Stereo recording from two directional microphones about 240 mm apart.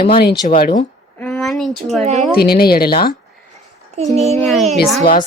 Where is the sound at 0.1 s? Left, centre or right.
Left.